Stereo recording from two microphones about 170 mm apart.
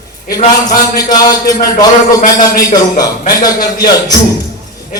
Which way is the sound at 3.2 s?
55° left (ahead or behind).